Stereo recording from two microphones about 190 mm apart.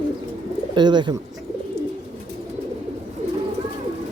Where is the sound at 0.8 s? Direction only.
25° right (ahead or behind).